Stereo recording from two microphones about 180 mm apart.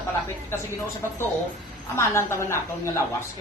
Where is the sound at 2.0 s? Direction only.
15° left (ahead or behind).